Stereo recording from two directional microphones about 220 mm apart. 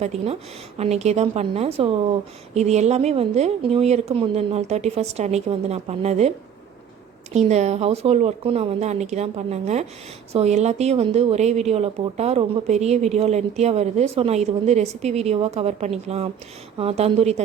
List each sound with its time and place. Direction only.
0.0 s a woman's voice: 30° right (ahead or behind)
7.3 s a woman's voice: 30° right (ahead or behind)